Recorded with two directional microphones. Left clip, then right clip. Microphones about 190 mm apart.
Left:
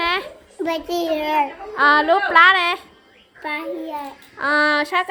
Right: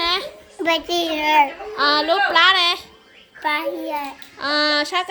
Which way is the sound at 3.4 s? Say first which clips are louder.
Right 4 dB; 10° right (ahead or behind).